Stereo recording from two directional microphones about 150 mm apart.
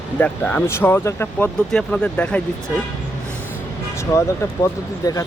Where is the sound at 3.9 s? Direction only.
20° left (ahead or behind).